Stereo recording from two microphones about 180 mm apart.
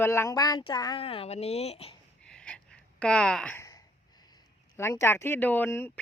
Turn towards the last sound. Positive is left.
turn(degrees=10)  # may be behind; listen again after turning